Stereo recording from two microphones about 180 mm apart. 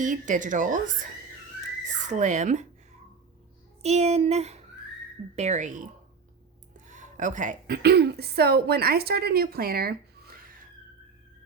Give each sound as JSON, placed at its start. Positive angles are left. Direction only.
{"t": 0.0, "sound": "speech", "side_deg": -45}
{"t": 3.8, "sound": "speech", "side_deg": -35}
{"t": 6.7, "sound": "a sound", "side_deg": -45}
{"t": 7.8, "sound": "speech", "side_deg": -65}